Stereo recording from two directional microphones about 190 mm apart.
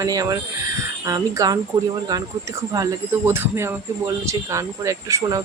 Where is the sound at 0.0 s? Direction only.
20° right (ahead or behind).